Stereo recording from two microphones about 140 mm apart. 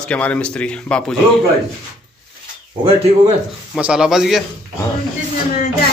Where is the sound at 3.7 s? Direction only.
5° right (ahead or behind).